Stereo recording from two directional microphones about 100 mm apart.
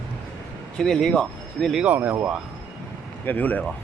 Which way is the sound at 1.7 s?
15° right (ahead or behind).